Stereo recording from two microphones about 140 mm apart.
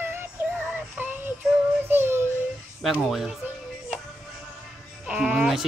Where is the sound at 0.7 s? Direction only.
15° right (ahead or behind).